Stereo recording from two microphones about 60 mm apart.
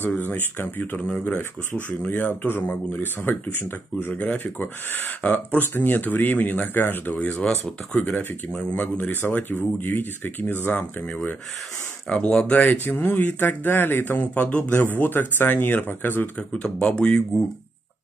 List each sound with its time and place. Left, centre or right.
0.2 s speech: left
4.1 s speech: left
4.6 s speech: left
7.2 s speech: left
12.1 s speech: centre
12.5 s speech: left
14.4 s speech: left
14.8 s speech: left
16.7 s speech: centre